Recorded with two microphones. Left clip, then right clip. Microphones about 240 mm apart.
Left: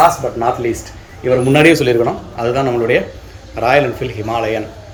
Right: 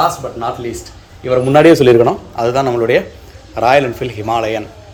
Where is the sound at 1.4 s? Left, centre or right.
Right.